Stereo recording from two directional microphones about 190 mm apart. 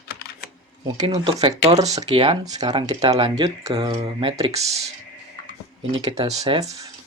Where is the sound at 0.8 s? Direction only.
20° right (ahead or behind).